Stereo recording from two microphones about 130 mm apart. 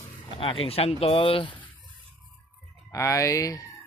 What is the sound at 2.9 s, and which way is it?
Speech, 25° left (ahead or behind).